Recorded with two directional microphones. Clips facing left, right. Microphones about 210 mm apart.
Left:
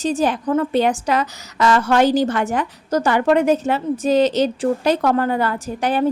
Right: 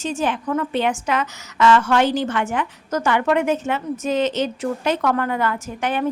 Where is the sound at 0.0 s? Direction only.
35° left (ahead or behind).